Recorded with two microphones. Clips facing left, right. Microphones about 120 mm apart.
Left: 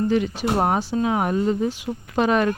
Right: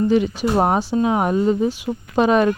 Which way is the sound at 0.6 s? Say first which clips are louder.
Right 4 dB; 20° right (ahead or behind).